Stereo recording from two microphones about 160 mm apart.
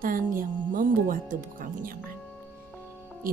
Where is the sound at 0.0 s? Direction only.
60° right (ahead or behind).